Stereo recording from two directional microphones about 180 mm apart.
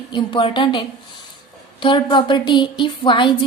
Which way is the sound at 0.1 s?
25° left (ahead or behind).